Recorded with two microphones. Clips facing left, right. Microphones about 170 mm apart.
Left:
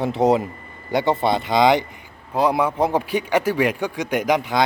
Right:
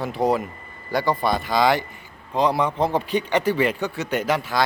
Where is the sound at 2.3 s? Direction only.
10° left (ahead or behind).